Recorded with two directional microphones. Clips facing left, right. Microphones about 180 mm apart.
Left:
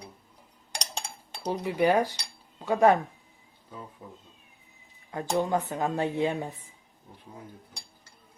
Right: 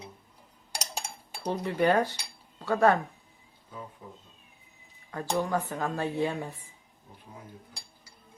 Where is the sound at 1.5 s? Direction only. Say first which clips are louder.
Left 1 dB; 10° left (ahead or behind).